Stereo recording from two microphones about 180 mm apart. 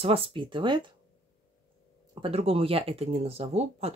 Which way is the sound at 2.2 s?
30° right (ahead or behind).